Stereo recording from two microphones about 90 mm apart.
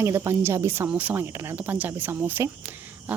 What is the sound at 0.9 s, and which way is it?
Speech, 15° right (ahead or behind).